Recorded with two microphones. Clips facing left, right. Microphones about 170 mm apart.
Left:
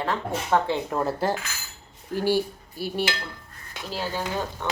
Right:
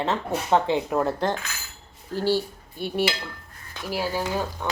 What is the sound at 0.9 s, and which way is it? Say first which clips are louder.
Speech: right 1 dB; centre (ahead or behind).